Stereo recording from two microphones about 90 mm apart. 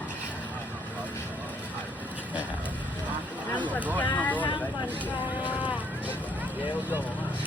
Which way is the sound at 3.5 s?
15° left (ahead or behind).